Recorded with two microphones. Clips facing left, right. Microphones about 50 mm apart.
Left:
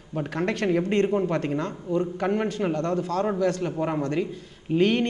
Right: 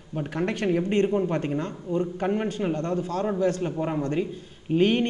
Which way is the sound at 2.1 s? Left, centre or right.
Left.